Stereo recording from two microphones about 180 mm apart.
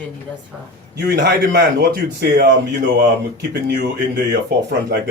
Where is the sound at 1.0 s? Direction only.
60° right (ahead or behind).